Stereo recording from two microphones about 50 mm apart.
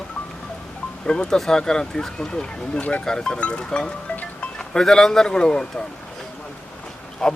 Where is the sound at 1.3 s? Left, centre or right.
Centre.